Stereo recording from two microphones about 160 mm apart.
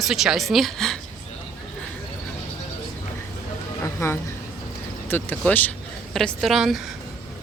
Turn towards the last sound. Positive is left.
turn(degrees=0)  # may be behind; listen again after turning